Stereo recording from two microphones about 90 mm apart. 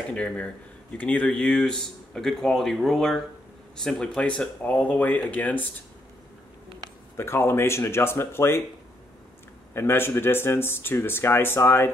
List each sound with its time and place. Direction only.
0.1 s speech: 15° left (ahead or behind)
7.2 s speech: 25° left (ahead or behind)
9.8 s speech: 25° left (ahead or behind)